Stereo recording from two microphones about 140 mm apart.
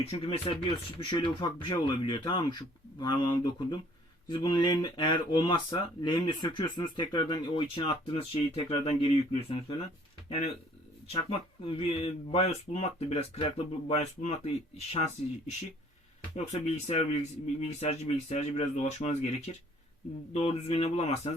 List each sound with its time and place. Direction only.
0.1 s speech: 45° left (ahead or behind)
10.2 s speech: 50° left (ahead or behind)
20.3 s speech: 50° left (ahead or behind)